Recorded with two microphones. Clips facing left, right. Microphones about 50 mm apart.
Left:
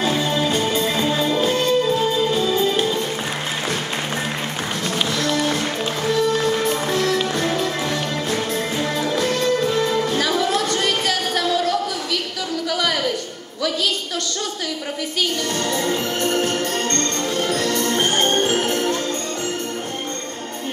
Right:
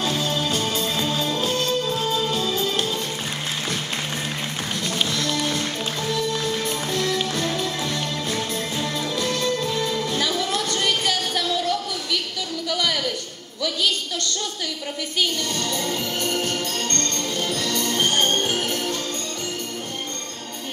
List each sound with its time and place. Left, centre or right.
0.0 s music: left
4.9 s music: centre
5.5 s music: left
7.2 s music: centre
10.1 s music: centre
15.7 s music: left